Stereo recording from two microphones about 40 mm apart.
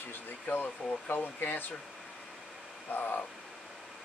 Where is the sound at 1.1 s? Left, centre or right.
Left.